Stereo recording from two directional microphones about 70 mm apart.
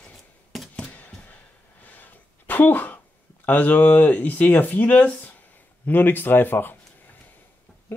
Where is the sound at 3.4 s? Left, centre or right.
Left.